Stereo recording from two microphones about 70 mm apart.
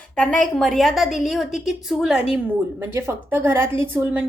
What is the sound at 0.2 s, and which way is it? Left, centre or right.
A woman's voice, centre.